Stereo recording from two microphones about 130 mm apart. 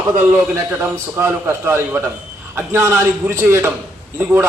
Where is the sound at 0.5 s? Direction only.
20° right (ahead or behind).